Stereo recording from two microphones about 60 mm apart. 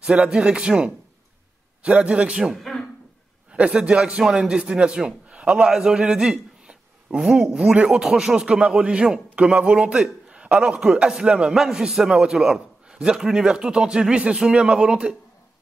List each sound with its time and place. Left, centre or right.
0.0 s a man's voice: centre
2.5 s a sound: centre
3.5 s a man's voice: centre
4.2 s a man's voice: centre